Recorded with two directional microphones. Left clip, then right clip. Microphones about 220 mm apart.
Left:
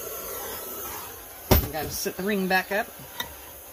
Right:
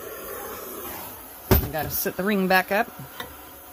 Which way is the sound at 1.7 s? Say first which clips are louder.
Right 3 dB; 55° right (ahead or behind).